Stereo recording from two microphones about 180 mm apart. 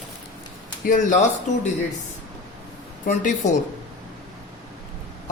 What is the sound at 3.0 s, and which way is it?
Speech, 45° left (ahead or behind).